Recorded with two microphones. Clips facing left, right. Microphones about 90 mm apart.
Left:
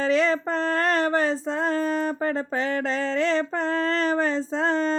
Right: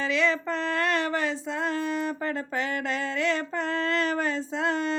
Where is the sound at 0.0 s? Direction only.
40° left (ahead or behind).